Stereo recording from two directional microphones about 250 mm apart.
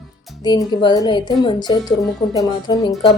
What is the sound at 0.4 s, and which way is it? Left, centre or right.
A woman's voice, centre.